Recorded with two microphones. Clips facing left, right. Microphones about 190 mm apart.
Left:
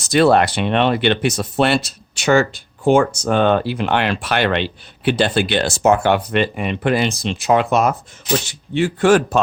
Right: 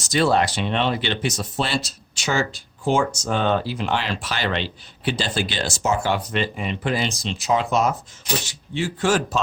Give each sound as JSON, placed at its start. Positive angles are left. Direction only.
{"t": 0.0, "sound": "speech", "side_deg": 60}